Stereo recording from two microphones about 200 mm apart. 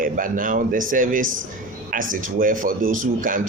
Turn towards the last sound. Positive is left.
turn(degrees=-45)  # may be behind; listen again after turning